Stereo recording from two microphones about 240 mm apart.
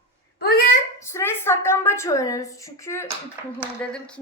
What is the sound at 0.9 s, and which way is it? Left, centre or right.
A woman's voice, centre.